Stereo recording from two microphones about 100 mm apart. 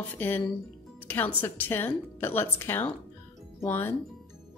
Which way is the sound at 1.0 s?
20° left (ahead or behind).